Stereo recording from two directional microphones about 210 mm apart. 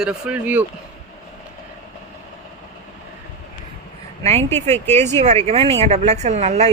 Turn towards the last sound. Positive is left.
turn(degrees=-30)  # may be behind; listen again after turning